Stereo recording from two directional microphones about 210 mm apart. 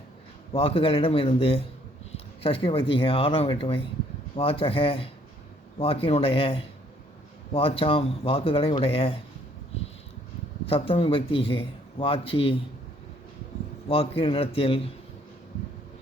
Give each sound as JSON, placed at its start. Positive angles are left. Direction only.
{"t": 0.5, "sound": "a man's voice", "side_deg": 25}
{"t": 10.7, "sound": "a man's voice", "side_deg": 25}
{"t": 13.8, "sound": "a man's voice", "side_deg": 25}